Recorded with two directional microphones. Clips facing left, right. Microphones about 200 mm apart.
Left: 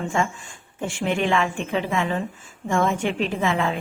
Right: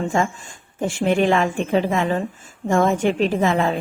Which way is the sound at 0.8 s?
40° right (ahead or behind).